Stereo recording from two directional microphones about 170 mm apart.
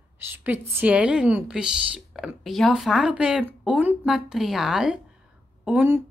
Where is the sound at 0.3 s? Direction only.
10° right (ahead or behind).